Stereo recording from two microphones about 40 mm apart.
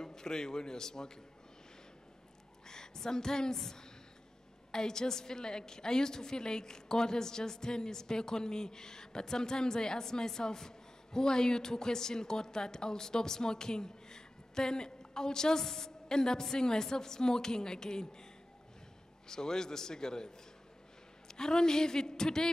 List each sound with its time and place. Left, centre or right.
0.0 s a woman's voice: centre
2.7 s a woman's voice: centre
19.2 s a woman's voice: centre
21.3 s a woman's voice: centre